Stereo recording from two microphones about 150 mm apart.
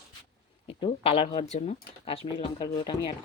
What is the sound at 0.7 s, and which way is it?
Speech, 35° left (ahead or behind).